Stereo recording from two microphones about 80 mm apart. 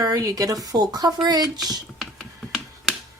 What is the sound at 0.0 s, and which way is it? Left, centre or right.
Speech, right.